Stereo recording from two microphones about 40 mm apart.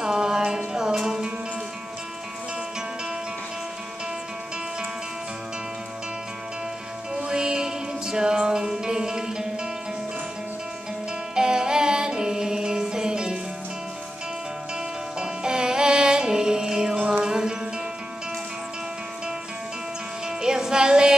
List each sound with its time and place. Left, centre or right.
0.0 s music: centre
7.2 s music: centre
11.3 s music: centre
15.1 s music: centre
16.9 s music: right
17.2 s music: centre
20.2 s music: centre